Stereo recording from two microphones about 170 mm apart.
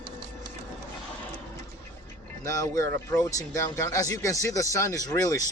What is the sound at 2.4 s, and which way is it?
Speech, 20° left (ahead or behind).